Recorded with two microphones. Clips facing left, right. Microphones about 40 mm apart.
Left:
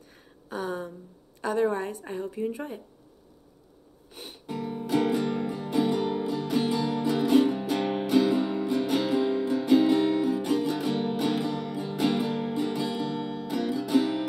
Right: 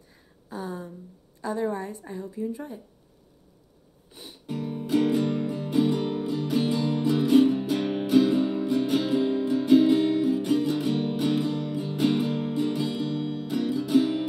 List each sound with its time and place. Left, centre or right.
0.5 s a woman's voice: left
4.1 s music: left
4.5 s music: centre